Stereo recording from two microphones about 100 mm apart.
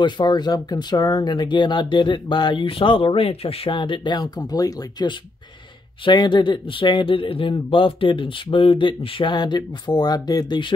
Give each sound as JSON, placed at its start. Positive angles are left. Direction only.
{"t": 0.0, "sound": "speech", "side_deg": 45}
{"t": 6.0, "sound": "speech", "side_deg": 55}